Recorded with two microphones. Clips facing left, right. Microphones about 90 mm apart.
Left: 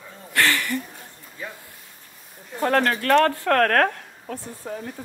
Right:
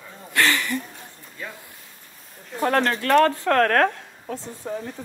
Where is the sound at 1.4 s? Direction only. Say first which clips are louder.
Even; 10° left (ahead or behind).